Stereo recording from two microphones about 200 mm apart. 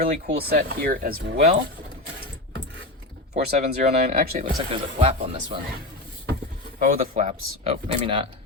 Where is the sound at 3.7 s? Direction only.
50° right (ahead or behind).